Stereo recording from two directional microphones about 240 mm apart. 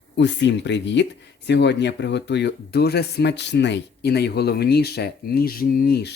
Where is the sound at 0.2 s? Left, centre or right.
Left.